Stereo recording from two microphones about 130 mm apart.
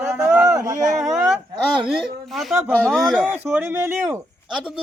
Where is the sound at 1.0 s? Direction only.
Centre (ahead or behind).